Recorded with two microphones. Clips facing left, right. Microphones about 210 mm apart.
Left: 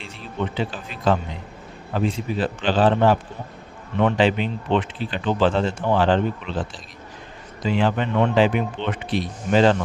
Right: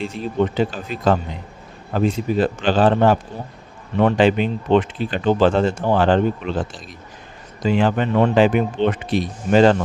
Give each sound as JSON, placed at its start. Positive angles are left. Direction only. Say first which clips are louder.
{"t": 0.0, "sound": "speech", "louder": "right 8 dB", "side_deg": -45}